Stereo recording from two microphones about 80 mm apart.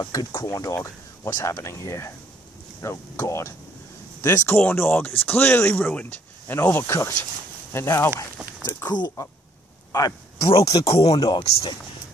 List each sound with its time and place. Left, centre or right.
0.0 s speech: left
0.3 s speech: left
8.8 s speech: left
9.9 s speech: left
11.1 s speech: left